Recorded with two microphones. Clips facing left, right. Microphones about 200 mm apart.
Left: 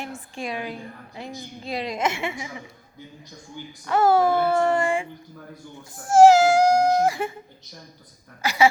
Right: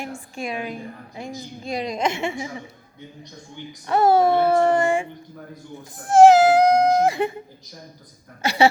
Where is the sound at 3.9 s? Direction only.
20° right (ahead or behind).